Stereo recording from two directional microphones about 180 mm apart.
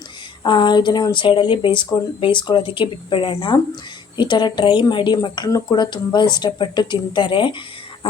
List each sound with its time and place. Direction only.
0.4 s speech: 25° left (ahead or behind)